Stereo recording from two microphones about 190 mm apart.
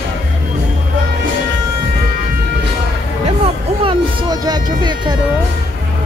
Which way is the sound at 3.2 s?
30° right (ahead or behind).